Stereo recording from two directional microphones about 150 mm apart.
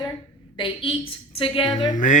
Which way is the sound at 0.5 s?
35° left (ahead or behind).